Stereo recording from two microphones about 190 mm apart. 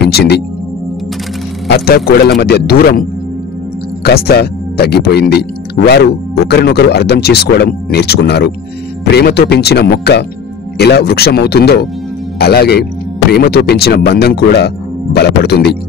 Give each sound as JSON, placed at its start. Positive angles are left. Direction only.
{"t": 0.0, "sound": "speech", "side_deg": 60}
{"t": 1.7, "sound": "speech", "side_deg": 55}